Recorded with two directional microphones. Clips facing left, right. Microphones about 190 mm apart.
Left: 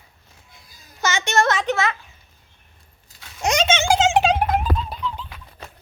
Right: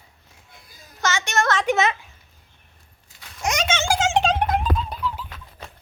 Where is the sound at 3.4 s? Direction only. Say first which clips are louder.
Left 4 dB; 25° left (ahead or behind).